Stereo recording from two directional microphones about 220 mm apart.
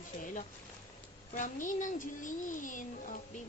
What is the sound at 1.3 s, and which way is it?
Speech, 35° left (ahead or behind).